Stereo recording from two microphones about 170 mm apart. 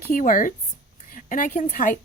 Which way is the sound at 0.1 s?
50° left (ahead or behind).